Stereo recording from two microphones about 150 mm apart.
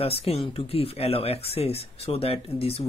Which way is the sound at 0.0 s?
40° left (ahead or behind).